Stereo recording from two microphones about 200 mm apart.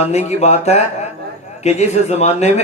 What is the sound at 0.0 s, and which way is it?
A man's voice, 35° left (ahead or behind).